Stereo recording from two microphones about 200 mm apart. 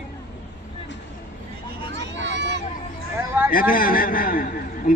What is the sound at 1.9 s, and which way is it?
Hubbub, 60° right (ahead or behind).